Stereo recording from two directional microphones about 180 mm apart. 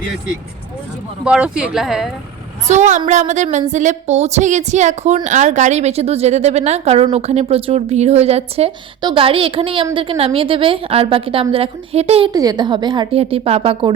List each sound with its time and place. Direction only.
1.2 s speech: 5° right (ahead or behind)
2.6 s a woman's voice: 40° right (ahead or behind)
12.3 s a woman's voice: 20° right (ahead or behind)